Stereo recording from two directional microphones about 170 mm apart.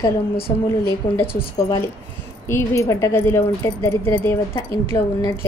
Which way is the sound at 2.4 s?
15° left (ahead or behind).